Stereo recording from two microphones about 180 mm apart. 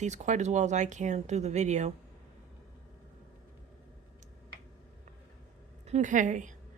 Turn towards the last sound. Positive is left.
turn(degrees=-45)  # may be behind; listen again after turning